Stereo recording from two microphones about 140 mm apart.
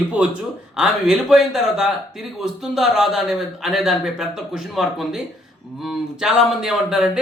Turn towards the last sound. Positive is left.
turn(degrees=-5)  # may be behind; listen again after turning